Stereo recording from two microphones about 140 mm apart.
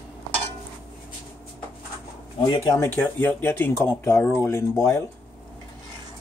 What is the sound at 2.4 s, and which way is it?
Speech, 30° left (ahead or behind).